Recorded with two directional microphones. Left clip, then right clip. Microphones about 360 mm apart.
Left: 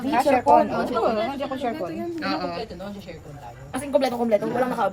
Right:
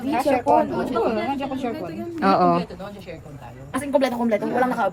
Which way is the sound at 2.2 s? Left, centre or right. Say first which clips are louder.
Right 12 dB; centre.